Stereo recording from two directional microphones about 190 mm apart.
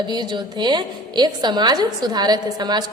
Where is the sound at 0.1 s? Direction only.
25° right (ahead or behind).